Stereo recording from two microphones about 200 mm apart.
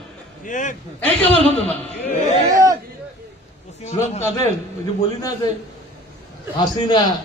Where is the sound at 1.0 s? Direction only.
30° left (ahead or behind).